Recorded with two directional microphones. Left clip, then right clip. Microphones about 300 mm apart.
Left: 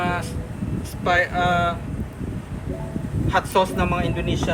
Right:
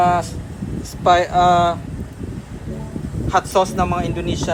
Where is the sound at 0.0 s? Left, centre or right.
Centre.